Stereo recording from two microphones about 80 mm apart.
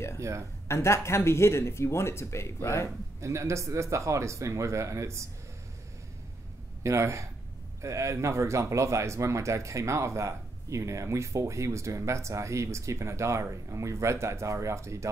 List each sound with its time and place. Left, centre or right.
0.2 s speech: right
0.7 s speech: left
3.2 s speech: right
6.8 s speech: right